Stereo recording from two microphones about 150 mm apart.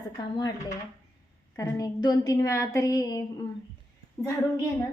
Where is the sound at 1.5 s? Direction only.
25° left (ahead or behind).